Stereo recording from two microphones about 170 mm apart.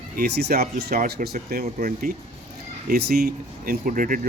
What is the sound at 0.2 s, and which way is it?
Speech, 70° right (ahead or behind).